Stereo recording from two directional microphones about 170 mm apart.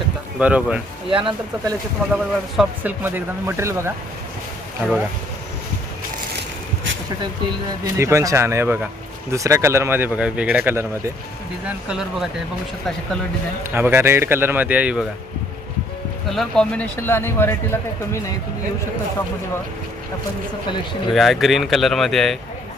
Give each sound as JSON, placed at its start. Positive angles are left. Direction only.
{"t": 0.3, "sound": "speech", "side_deg": -5}
{"t": 1.1, "sound": "speech", "side_deg": -30}
{"t": 2.1, "sound": "speech", "side_deg": -5}
{"t": 7.9, "sound": "speech", "side_deg": -15}
{"t": 13.7, "sound": "speech", "side_deg": -15}
{"t": 16.3, "sound": "speech", "side_deg": 0}
{"t": 21.1, "sound": "speech", "side_deg": 0}